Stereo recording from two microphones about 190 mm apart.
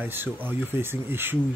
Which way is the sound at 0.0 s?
10° right (ahead or behind).